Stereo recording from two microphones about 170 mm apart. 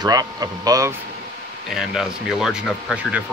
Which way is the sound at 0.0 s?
20° right (ahead or behind).